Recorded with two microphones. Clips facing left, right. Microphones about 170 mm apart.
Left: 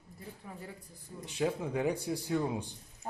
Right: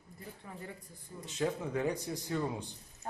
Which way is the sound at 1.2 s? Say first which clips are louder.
Left 2 dB; 10° left (ahead or behind).